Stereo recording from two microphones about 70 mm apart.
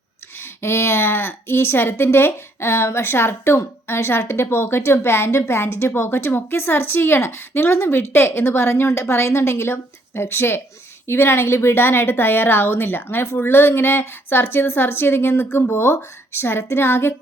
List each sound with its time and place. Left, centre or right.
0.3 s a woman's voice: left